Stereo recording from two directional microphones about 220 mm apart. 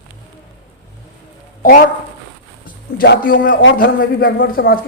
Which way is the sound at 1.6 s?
40° left (ahead or behind).